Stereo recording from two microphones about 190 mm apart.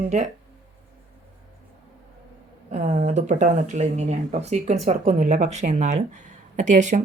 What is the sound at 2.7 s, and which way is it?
Speech, 40° right (ahead or behind).